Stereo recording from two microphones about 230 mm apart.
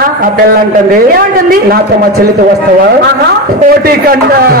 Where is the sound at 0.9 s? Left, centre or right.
Right.